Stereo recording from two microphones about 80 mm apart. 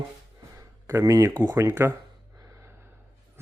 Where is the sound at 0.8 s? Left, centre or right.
Right.